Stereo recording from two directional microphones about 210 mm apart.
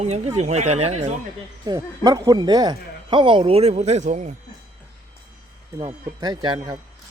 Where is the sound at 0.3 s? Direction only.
30° right (ahead or behind).